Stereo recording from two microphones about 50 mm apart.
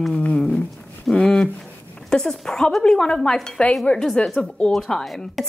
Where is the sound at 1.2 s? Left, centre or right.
Centre.